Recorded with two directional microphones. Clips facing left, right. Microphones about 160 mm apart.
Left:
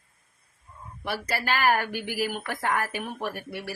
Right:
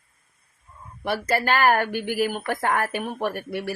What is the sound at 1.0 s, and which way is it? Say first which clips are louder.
A woman's voice: right 6 dB; 50° right (ahead or behind).